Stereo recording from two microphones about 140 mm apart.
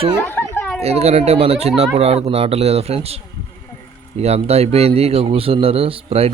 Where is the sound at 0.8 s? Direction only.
50° right (ahead or behind).